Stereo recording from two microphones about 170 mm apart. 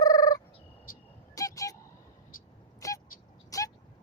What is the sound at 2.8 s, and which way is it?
Vehicle, 20° left (ahead or behind).